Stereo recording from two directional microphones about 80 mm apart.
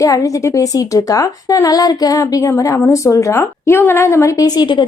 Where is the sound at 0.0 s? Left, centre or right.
Left.